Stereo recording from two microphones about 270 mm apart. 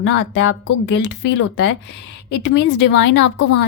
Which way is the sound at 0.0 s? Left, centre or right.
Left.